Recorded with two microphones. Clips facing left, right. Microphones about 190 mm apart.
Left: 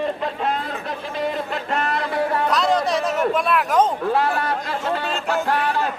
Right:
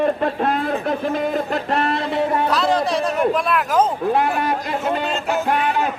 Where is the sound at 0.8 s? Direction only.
50° right (ahead or behind); by 2.4 s 25° right (ahead or behind).